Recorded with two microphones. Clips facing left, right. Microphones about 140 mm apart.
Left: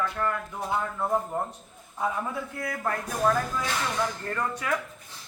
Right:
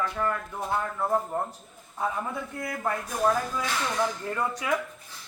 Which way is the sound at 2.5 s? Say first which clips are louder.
Right 1 dB; centre (ahead or behind).